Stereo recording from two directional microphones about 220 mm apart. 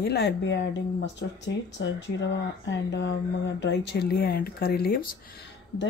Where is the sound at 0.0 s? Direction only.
45° left (ahead or behind).